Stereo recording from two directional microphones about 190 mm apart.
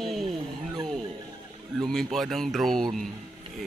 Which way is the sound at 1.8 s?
Centre (ahead or behind).